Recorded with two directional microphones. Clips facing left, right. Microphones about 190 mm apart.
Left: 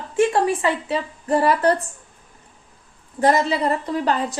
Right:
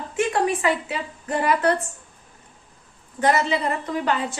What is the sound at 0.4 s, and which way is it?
Speech, 30° left (ahead or behind).